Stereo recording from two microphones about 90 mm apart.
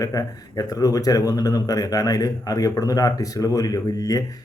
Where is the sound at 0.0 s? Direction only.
40° left (ahead or behind).